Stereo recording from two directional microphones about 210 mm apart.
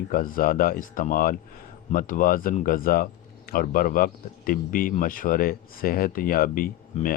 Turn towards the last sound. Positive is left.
turn(degrees=40)  # may be behind; listen again after turning